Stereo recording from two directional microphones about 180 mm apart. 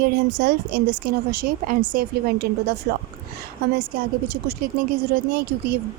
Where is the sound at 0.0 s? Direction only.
60° right (ahead or behind).